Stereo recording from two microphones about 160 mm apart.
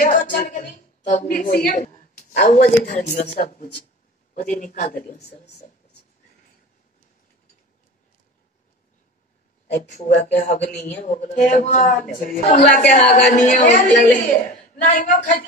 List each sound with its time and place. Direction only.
0.0 s a woman's voice: 60° left (ahead or behind)
4.4 s speech: 55° left (ahead or behind)
9.8 s speech: 50° left (ahead or behind)